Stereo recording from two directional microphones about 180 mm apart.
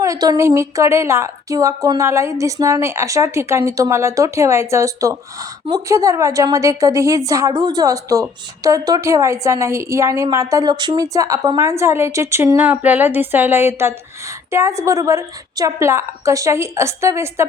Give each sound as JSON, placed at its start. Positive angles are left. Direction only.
{"t": 0.0, "sound": "a woman's voice", "side_deg": -20}